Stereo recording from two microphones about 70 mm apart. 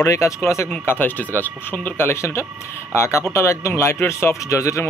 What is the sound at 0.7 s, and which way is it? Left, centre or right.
A man's voice, left.